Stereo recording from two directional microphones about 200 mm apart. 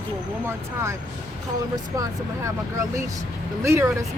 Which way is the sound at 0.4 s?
15° right (ahead or behind).